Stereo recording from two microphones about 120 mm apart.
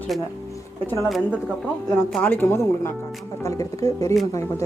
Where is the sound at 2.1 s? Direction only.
15° left (ahead or behind); by 4.1 s 30° left (ahead or behind).